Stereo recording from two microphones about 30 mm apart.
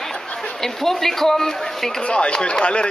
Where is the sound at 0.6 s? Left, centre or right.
Centre.